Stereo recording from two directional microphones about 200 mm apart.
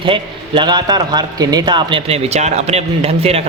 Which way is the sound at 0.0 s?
25° right (ahead or behind).